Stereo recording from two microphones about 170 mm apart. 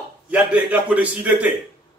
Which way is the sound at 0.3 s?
10° right (ahead or behind).